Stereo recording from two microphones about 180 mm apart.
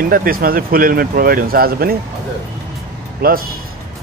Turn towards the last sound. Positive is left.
turn(degrees=-55)  # may be behind; listen again after turning